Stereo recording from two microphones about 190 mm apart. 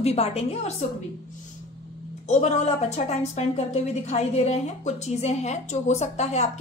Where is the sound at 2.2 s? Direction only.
35° left (ahead or behind).